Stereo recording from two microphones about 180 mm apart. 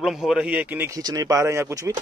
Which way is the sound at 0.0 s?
Centre (ahead or behind).